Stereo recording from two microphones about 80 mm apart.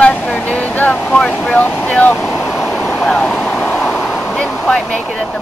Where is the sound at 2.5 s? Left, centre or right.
Centre.